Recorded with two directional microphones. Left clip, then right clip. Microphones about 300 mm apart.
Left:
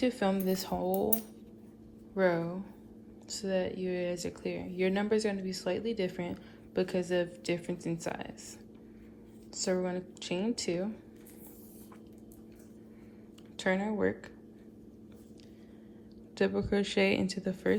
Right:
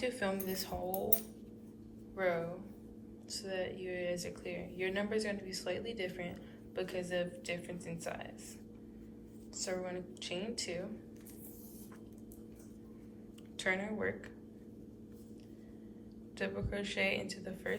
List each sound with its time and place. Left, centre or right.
0.0 s speech: centre
2.1 s a woman's voice: centre
9.6 s speech: centre
13.6 s speech: centre
16.4 s speech: centre